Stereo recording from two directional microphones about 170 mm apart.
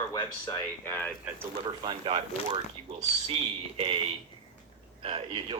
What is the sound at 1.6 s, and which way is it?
Speech, 30° right (ahead or behind).